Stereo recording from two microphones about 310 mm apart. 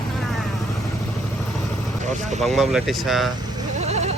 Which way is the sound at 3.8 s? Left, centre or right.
Right.